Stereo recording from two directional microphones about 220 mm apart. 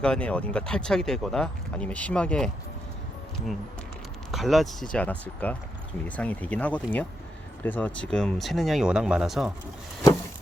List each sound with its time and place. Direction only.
0.0 s speech: 5° left (ahead or behind)
4.3 s speech: centre (ahead or behind)